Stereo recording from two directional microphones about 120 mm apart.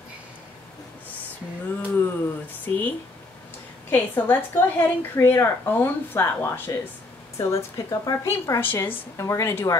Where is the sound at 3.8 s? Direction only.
15° left (ahead or behind).